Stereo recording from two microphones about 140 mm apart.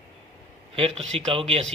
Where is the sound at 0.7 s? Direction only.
45° right (ahead or behind).